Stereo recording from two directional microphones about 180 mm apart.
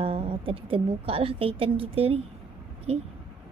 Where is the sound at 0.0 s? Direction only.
30° right (ahead or behind).